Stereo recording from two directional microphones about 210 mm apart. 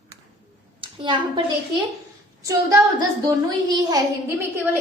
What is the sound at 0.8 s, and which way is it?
Speech, 25° right (ahead or behind).